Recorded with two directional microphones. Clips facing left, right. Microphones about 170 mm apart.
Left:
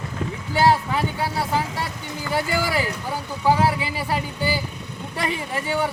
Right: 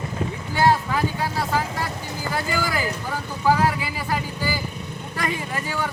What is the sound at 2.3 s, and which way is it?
Speech, 25° left (ahead or behind).